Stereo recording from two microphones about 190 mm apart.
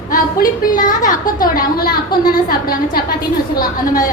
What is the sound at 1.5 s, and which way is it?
A woman's voice, 50° left (ahead or behind).